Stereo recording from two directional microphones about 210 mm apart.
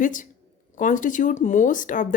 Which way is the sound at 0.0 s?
40° left (ahead or behind).